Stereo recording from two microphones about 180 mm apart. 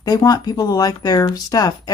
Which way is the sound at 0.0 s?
20° left (ahead or behind).